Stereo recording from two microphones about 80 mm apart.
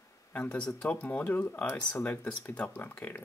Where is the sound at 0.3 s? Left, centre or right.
Centre.